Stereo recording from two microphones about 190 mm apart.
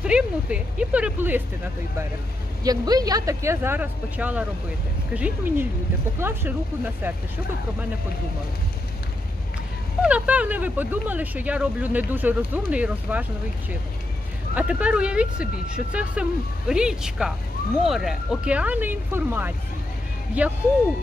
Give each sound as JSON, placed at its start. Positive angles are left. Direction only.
{"t": 0.0, "sound": "speech", "side_deg": -5}
{"t": 2.6, "sound": "speech", "side_deg": -20}
{"t": 10.0, "sound": "speech", "side_deg": -5}
{"t": 14.5, "sound": "speech", "side_deg": -5}